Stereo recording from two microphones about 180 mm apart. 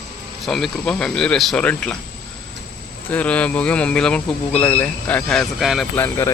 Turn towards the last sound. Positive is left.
turn(degrees=15)  # may be behind; listen again after turning